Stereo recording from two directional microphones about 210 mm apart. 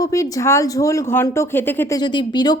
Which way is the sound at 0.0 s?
15° left (ahead or behind).